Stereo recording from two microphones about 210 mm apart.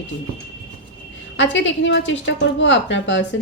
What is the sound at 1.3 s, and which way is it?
Speech, 60° left (ahead or behind).